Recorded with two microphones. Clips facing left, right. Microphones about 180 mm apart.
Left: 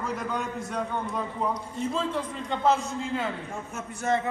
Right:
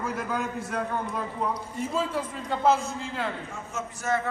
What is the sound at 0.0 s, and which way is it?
A man's voice, 5° right (ahead or behind).